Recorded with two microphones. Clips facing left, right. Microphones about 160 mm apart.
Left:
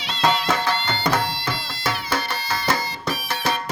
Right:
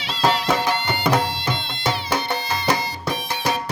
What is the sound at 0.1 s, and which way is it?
Music, 5° right (ahead or behind).